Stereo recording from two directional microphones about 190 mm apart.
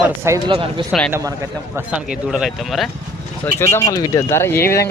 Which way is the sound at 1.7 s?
5° right (ahead or behind).